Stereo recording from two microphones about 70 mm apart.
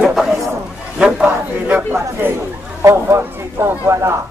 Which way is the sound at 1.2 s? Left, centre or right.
Right.